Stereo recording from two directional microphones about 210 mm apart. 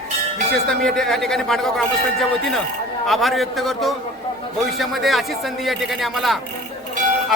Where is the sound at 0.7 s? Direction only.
Centre (ahead or behind).